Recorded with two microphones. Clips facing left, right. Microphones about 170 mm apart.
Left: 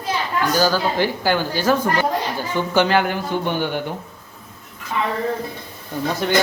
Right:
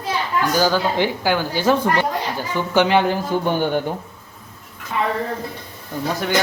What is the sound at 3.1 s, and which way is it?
Speech, 45° right (ahead or behind).